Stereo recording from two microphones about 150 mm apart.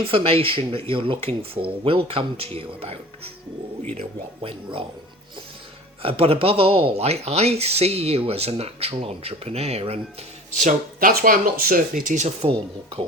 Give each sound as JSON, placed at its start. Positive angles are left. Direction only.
{"t": 0.1, "sound": "speech", "side_deg": -40}
{"t": 4.4, "sound": "speech", "side_deg": -35}
{"t": 6.0, "sound": "speech", "side_deg": -40}
{"t": 10.6, "sound": "speech", "side_deg": -60}